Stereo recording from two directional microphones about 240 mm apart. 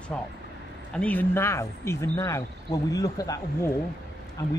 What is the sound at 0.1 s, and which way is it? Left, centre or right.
Speech, centre.